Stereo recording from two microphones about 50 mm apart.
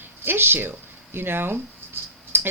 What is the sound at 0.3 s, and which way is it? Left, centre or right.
Speech, right.